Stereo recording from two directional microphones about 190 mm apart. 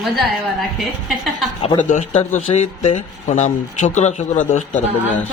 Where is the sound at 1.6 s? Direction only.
40° left (ahead or behind).